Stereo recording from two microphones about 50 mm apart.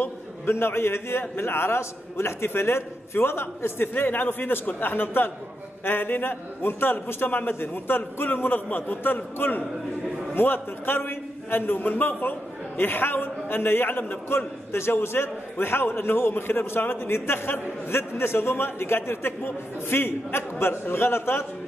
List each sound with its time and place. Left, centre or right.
0.0 s a man's voice: left